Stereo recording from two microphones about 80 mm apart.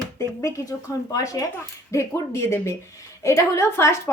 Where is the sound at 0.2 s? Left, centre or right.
Left.